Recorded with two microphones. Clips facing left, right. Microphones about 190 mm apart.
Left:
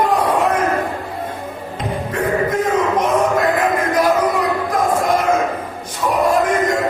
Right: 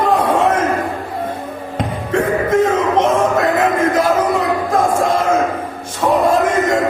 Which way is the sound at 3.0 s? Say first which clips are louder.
Right 2 dB; 25° right (ahead or behind).